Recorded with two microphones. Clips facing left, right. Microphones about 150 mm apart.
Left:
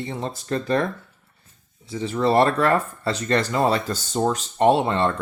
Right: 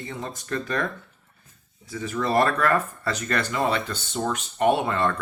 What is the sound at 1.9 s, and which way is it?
Speech, 30° left (ahead or behind).